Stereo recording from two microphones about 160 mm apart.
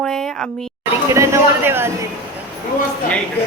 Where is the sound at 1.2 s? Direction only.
15° right (ahead or behind).